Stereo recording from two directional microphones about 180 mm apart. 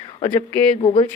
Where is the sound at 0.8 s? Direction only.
30° left (ahead or behind).